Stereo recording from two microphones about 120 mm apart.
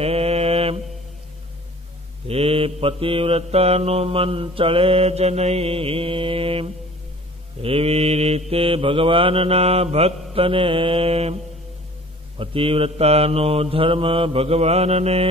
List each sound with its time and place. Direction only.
0.0 s mantra: 60° right (ahead or behind)
2.2 s mantra: 55° right (ahead or behind)
12.4 s mantra: 50° right (ahead or behind)